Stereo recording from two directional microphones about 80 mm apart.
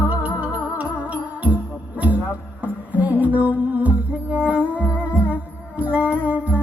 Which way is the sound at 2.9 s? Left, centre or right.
Centre.